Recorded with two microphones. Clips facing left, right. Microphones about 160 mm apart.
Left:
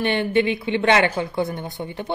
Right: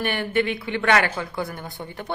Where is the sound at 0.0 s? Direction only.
20° left (ahead or behind).